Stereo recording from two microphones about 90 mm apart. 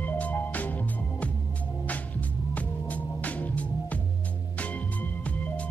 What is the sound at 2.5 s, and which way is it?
Music, 15° left (ahead or behind).